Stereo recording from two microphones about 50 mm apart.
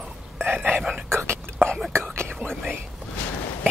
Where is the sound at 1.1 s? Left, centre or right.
Right.